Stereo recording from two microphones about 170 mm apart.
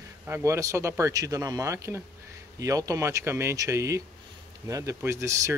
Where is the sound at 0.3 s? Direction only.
15° right (ahead or behind).